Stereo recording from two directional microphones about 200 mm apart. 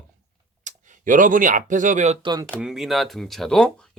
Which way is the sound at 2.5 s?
5° right (ahead or behind).